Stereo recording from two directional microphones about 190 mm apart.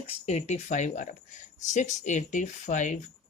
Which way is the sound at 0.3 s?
35° left (ahead or behind).